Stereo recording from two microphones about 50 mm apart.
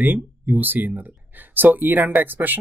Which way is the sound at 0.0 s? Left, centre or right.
Right.